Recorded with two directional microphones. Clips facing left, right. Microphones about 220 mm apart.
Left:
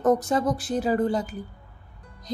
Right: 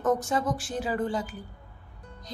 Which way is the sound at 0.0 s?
35° left (ahead or behind).